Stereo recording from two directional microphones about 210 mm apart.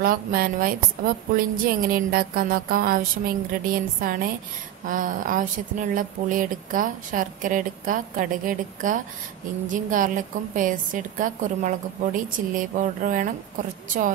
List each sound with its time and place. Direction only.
0.0 s a woman's voice: 45° right (ahead or behind)